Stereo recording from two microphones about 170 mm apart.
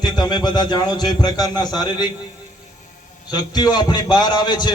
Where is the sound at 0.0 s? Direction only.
25° left (ahead or behind).